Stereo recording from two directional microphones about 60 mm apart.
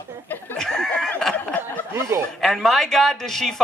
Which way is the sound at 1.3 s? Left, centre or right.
Left.